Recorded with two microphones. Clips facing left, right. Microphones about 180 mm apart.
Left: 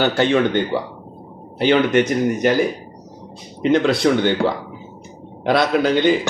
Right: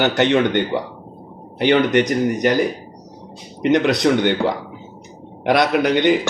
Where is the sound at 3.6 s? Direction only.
20° right (ahead or behind).